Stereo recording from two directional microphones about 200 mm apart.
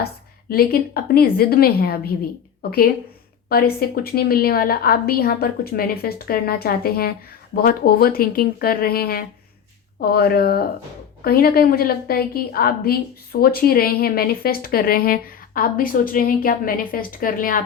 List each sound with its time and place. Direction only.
0.5 s a woman's voice: 50° left (ahead or behind)